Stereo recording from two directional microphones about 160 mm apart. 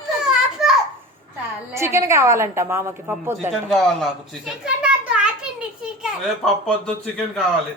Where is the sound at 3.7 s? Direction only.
Centre (ahead or behind).